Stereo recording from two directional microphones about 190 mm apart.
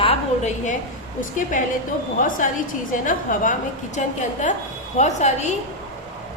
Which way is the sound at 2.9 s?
45° left (ahead or behind).